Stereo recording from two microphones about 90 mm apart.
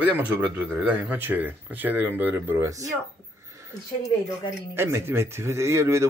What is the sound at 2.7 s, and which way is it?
Speech, 40° right (ahead or behind).